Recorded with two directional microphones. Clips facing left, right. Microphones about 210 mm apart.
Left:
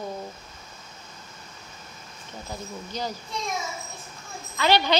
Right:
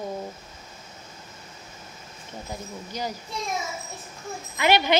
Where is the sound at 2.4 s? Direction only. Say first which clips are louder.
Left 1 dB; 10° right (ahead or behind).